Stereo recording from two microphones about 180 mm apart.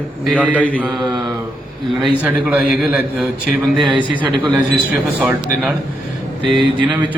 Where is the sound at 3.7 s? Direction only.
25° right (ahead or behind).